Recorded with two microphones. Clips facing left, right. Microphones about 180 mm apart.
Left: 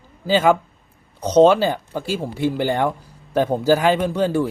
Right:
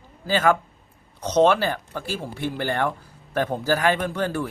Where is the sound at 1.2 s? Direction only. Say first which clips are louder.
Left 5 dB; 15° left (ahead or behind).